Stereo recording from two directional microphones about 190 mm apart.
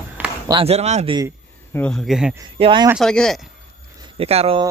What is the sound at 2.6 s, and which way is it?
Speech, 25° right (ahead or behind).